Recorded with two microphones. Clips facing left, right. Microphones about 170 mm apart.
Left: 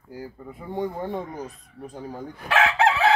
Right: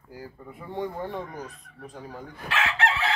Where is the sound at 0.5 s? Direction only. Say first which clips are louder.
Left 3 dB; 15° left (ahead or behind).